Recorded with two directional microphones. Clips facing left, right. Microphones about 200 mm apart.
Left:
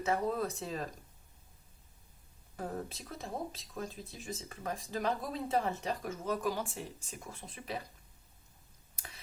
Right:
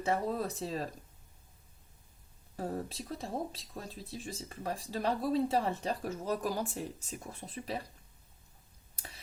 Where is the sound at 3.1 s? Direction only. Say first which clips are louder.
Right 2 dB; 35° right (ahead or behind).